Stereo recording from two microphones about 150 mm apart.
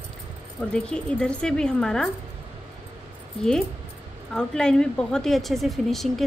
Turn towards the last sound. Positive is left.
turn(degrees=0)  # may be behind; listen again after turning